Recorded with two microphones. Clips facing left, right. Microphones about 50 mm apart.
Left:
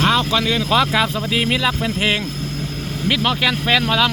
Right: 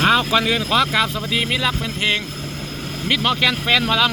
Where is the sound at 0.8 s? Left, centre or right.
Centre.